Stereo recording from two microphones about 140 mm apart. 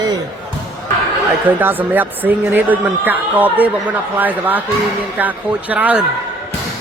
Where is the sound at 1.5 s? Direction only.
15° right (ahead or behind).